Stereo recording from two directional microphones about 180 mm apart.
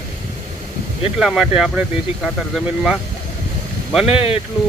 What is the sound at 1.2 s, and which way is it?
Speech, 5° right (ahead or behind).